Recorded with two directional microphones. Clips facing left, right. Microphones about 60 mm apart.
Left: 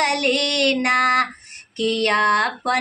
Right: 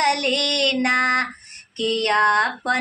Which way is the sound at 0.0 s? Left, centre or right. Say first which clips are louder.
Left 1 dB; left.